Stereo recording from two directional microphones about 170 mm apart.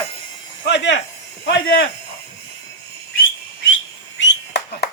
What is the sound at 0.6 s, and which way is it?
Speech, 90° left.